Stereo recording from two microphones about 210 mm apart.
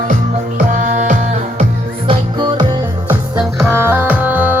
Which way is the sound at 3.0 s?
10° right (ahead or behind).